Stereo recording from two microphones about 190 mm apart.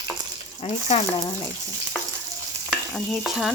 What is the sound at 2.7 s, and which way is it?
Stir, centre (ahead or behind).